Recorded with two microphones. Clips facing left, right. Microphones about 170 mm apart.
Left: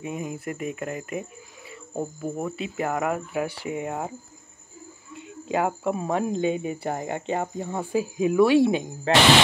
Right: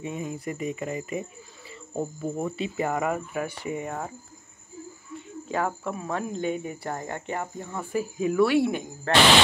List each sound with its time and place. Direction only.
0.0 s speech: 5° left (ahead or behind)
5.5 s speech: 15° left (ahead or behind)